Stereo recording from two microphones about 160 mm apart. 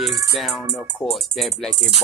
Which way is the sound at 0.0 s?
Centre (ahead or behind).